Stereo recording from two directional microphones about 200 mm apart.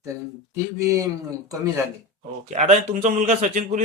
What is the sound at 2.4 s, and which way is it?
Speech, 35° right (ahead or behind).